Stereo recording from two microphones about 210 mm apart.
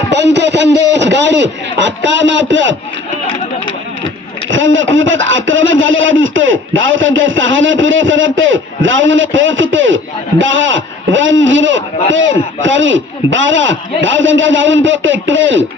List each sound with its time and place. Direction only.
0.1 s speech: 55° right (ahead or behind)
4.0 s speech: 65° right (ahead or behind)